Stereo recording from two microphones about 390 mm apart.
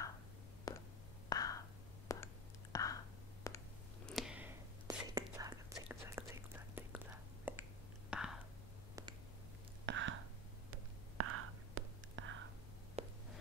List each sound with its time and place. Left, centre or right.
0.7 s whispering: centre
9.8 s whispering: right
13.0 s a sound: centre